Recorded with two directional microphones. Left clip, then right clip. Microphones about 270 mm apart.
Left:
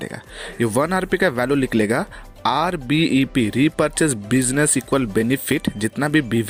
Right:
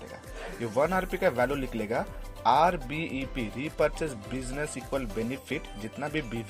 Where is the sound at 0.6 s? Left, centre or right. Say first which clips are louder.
Left 7 dB; left.